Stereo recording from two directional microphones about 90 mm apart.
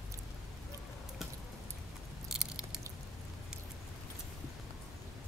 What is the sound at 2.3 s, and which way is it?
Biting, 5° right (ahead or behind).